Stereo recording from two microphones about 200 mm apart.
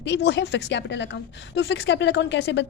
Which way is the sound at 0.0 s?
60° left (ahead or behind).